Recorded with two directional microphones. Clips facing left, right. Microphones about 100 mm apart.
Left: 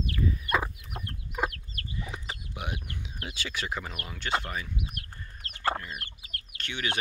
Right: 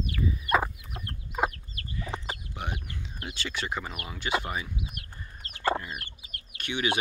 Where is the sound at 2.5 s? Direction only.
5° left (ahead or behind).